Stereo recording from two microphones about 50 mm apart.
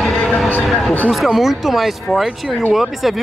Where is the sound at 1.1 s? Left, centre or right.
Centre.